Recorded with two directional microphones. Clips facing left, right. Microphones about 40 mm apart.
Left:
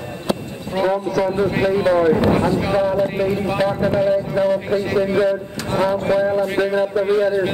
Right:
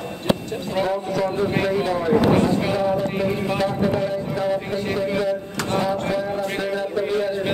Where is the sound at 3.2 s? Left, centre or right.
Centre.